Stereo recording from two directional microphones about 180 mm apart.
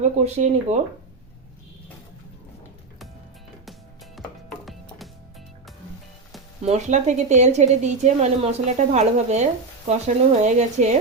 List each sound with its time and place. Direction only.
0.0 s a woman's voice: 40° right (ahead or behind)
3.7 s music: centre (ahead or behind)
6.7 s a woman's voice: 40° right (ahead or behind)